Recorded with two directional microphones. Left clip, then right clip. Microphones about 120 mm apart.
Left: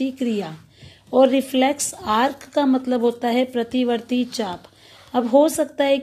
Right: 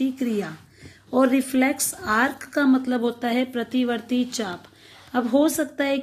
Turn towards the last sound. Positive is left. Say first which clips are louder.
# left 5 dB
turn(degrees=25)  # may be behind; listen again after turning